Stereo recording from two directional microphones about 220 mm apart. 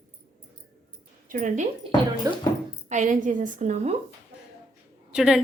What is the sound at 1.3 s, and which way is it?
Speech, 35° right (ahead or behind).